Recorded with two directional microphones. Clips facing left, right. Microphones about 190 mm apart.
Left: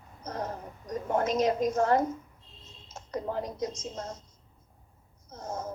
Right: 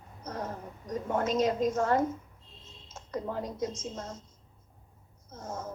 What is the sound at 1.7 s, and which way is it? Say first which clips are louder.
Speech: left 2 dB; 35° left (ahead or behind).